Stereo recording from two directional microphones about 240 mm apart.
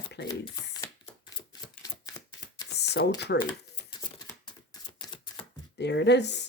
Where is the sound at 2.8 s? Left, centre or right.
Left.